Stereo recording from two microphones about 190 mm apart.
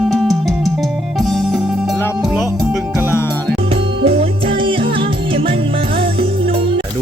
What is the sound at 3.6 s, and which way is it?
Music, 30° right (ahead or behind).